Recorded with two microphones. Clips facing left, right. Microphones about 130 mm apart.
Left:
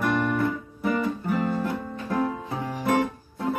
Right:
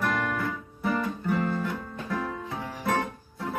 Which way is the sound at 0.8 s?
Centre (ahead or behind).